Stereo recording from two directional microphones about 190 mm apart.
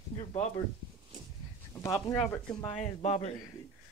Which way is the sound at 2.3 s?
5° left (ahead or behind).